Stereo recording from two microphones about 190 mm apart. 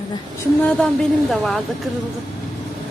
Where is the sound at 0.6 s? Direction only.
5° left (ahead or behind).